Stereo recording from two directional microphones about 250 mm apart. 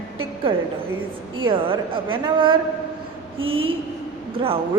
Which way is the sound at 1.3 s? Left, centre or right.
Centre.